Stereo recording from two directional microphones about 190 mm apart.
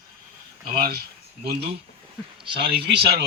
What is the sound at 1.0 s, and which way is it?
Speech, 55° right (ahead or behind).